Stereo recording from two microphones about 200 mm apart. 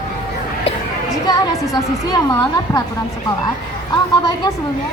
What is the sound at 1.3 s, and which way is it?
A woman's voice, 20° left (ahead or behind).